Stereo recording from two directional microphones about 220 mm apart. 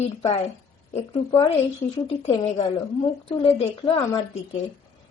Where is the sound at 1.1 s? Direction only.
20° left (ahead or behind).